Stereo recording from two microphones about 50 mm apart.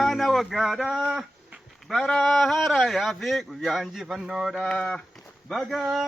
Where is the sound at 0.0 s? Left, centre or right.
Centre.